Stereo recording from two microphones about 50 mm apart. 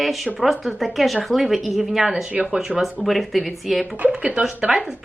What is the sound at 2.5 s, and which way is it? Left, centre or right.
Speech, centre.